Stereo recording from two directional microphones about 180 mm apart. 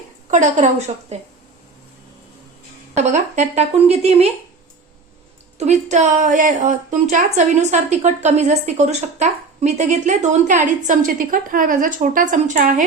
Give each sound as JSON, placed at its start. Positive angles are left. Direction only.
{"t": 0.3, "sound": "speech", "side_deg": -40}
{"t": 2.9, "sound": "speech", "side_deg": -40}
{"t": 5.5, "sound": "a woman's voice", "side_deg": -40}